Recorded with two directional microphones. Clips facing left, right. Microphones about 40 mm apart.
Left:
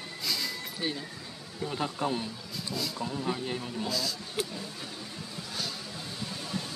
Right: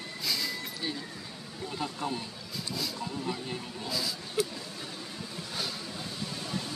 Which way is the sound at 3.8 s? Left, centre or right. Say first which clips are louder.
Even; centre.